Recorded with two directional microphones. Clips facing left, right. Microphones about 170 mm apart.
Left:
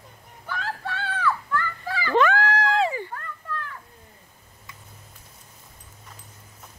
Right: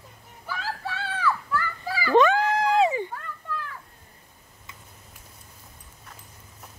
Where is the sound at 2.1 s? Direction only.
20° right (ahead or behind).